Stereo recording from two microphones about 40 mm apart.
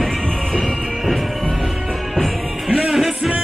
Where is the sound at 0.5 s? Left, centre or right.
Centre.